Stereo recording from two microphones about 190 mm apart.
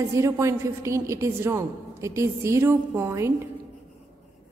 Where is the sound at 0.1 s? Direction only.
15° right (ahead or behind).